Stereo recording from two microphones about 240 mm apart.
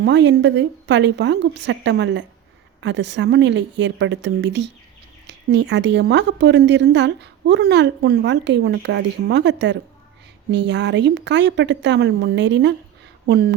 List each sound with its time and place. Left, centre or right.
0.0 s speech: right